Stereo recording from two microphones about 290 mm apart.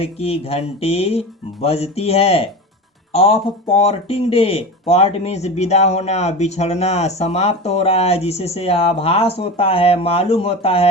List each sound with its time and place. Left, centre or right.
0.0 s speech: centre